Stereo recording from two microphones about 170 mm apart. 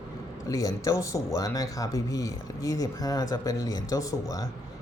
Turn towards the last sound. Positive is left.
turn(degrees=20)  # may be behind; listen again after turning